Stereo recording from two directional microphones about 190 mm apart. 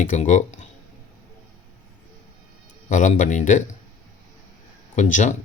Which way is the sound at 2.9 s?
40° left (ahead or behind).